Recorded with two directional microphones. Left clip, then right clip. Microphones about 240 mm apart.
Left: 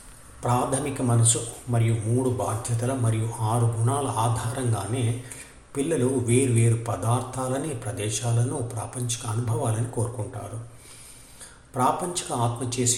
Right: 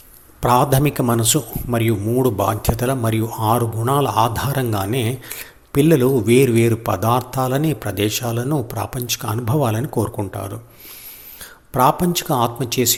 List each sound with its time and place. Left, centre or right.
0.4 s speech: right
11.7 s speech: right